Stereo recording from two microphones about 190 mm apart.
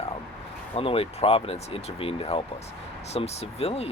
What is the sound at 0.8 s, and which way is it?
Speech, 30° left (ahead or behind).